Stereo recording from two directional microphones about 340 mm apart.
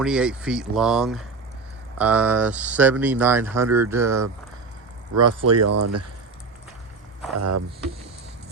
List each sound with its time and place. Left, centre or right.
0.0 s speech: centre
5.1 s speech: right
7.3 s speech: right